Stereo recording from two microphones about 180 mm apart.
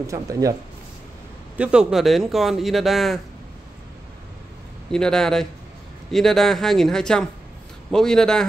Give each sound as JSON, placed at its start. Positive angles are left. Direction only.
{"t": 0.0, "sound": "speech", "side_deg": -20}
{"t": 1.6, "sound": "a man's voice", "side_deg": -5}
{"t": 4.9, "sound": "a man's voice", "side_deg": 5}